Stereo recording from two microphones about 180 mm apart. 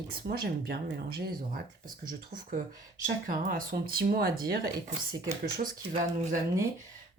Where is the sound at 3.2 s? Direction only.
50° right (ahead or behind).